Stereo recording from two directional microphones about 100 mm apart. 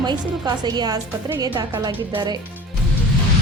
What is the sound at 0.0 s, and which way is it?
Speech, 45° right (ahead or behind).